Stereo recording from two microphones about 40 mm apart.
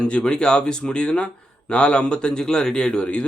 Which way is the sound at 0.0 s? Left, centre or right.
Left.